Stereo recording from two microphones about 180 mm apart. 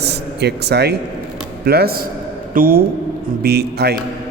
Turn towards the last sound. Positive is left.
turn(degrees=-65)  # may be behind; listen again after turning